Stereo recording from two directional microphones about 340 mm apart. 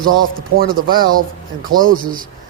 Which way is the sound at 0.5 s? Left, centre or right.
Right.